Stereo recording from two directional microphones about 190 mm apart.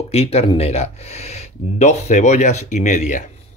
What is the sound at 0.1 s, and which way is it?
Speech, 30° left (ahead or behind).